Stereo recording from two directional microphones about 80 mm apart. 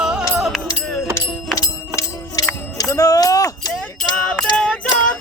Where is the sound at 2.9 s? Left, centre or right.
Left.